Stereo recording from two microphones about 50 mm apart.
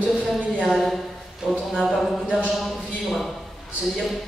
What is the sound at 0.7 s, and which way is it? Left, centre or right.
Speech, centre.